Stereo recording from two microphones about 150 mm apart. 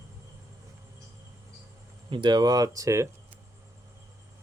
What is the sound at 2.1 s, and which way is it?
Speech, 30° right (ahead or behind).